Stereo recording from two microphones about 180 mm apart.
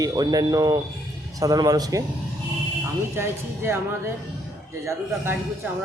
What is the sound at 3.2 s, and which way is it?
A man's voice, 15° right (ahead or behind).